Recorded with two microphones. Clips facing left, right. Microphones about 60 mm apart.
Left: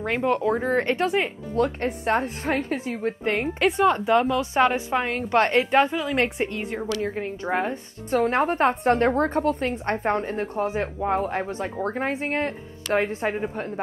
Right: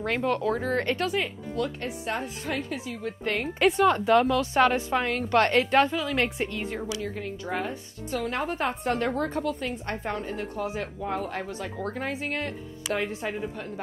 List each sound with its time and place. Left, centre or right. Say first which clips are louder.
0.0 s speech: left 3 dB; centre
3.7 s a woman's voice: left 1 dB; centre
7.0 s speech: left 5 dB; left